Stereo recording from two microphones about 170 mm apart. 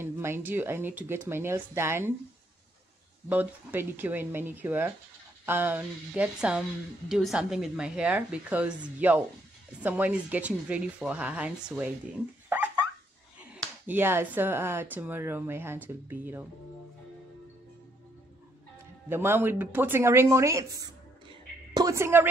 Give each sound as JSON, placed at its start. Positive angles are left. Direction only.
{"t": 0.0, "sound": "speech", "side_deg": -15}
{"t": 3.3, "sound": "a woman's voice", "side_deg": -10}
{"t": 13.5, "sound": "speech", "side_deg": -10}
{"t": 19.0, "sound": "speech", "side_deg": -15}